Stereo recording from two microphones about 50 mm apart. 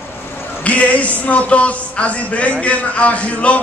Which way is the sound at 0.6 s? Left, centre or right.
Left.